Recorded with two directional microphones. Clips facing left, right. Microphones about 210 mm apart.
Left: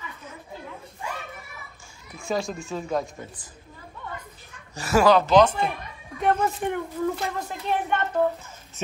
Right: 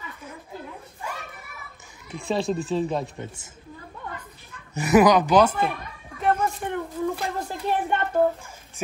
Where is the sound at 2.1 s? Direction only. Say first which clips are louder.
Right 3 dB; 30° right (ahead or behind).